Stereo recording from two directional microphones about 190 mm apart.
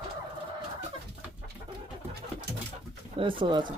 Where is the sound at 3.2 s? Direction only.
25° right (ahead or behind).